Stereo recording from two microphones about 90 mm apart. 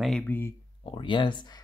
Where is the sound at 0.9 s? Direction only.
65° left (ahead or behind).